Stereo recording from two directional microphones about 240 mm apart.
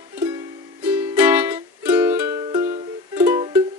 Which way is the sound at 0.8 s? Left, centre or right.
Centre.